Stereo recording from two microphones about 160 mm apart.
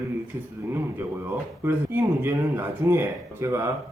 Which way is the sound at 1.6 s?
15° right (ahead or behind).